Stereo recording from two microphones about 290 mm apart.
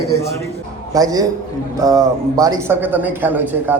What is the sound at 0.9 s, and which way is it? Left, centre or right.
A man's voice, centre.